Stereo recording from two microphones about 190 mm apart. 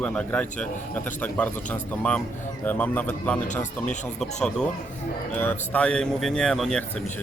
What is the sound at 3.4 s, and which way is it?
Speech, 40° left (ahead or behind).